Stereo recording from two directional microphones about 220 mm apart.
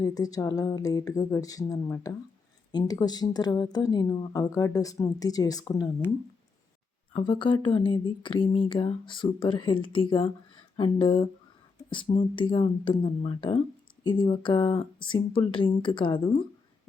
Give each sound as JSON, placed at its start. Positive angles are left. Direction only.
{"t": 0.0, "sound": "speech", "side_deg": 15}
{"t": 7.1, "sound": "speech", "side_deg": 20}